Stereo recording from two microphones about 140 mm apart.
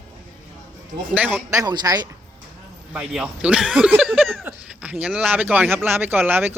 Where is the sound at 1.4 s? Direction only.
25° right (ahead or behind).